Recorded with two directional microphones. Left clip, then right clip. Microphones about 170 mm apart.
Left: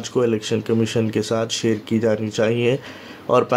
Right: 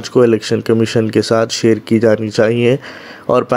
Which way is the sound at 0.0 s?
30° right (ahead or behind).